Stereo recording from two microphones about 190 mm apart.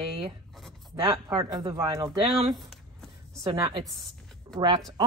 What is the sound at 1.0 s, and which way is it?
Speech, 20° right (ahead or behind).